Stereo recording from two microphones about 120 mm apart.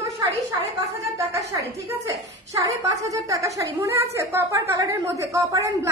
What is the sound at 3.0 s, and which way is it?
A woman's voice, 25° right (ahead or behind).